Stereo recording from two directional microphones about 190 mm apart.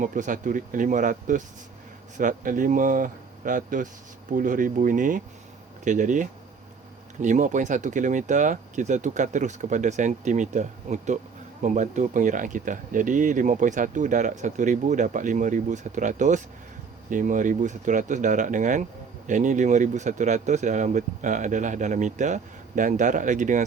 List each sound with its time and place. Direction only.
0.0 s speech: 45° right (ahead or behind)